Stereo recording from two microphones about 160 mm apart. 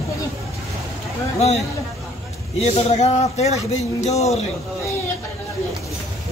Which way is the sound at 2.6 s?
40° left (ahead or behind).